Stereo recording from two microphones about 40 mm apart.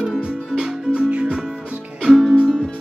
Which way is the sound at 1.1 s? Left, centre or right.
Right.